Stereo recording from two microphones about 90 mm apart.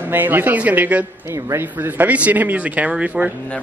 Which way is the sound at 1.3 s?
30° right (ahead or behind).